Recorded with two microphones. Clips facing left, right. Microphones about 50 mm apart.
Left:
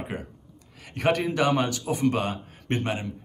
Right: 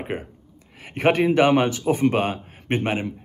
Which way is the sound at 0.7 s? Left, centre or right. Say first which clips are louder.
Right 5 dB; right.